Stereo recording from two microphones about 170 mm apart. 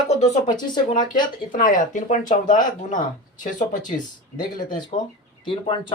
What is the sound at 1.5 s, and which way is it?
Speech, 50° left (ahead or behind).